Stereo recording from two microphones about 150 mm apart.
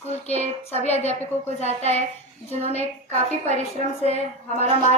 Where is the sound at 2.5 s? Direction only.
45° left (ahead or behind).